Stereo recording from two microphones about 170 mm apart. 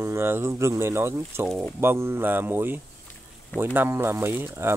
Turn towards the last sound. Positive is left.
turn(degrees=-15)  # may be behind; listen again after turning